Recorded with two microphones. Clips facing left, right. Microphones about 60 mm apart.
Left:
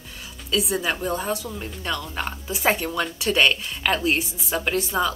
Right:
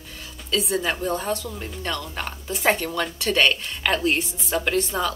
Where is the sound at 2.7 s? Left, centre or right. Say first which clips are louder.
Even; centre.